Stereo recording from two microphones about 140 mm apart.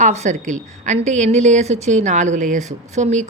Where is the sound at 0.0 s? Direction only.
55° right (ahead or behind).